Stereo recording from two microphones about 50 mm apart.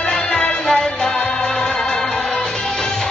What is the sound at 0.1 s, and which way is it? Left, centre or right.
Music, centre.